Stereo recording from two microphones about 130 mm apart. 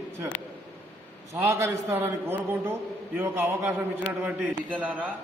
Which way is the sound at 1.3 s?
20° right (ahead or behind).